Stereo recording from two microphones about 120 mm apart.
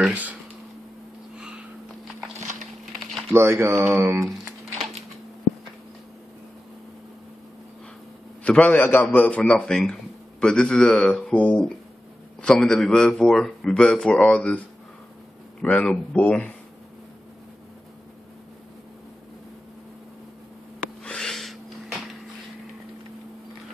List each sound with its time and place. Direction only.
0.1 s speech: 10° right (ahead or behind)
1.3 s sniff: 5° right (ahead or behind)
2.8 s a sound: centre (ahead or behind)
3.3 s speech: 20° right (ahead or behind)
4.3 s a sound: centre (ahead or behind)
8.5 s a man's voice: 10° left (ahead or behind)
15.6 s a man's voice: 10° left (ahead or behind)
20.8 s snort: 5° left (ahead or behind)